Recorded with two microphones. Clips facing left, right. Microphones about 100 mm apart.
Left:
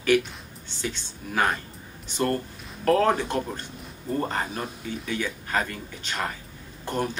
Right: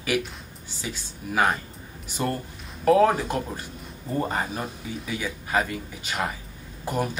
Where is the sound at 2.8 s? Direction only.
10° right (ahead or behind).